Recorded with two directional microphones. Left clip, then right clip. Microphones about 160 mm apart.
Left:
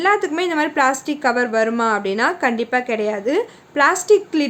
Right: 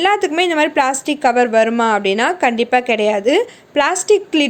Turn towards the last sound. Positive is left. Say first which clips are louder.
# right 2 dB
turn(degrees=-15)  # may be behind; listen again after turning